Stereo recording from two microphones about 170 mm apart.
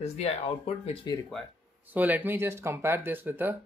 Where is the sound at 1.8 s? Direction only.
10° right (ahead or behind).